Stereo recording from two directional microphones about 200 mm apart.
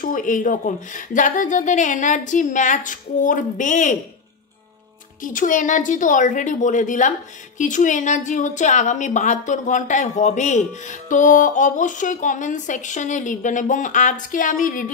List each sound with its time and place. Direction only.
0.0 s a woman's voice: 40° left (ahead or behind)
5.2 s a woman's voice: 40° left (ahead or behind)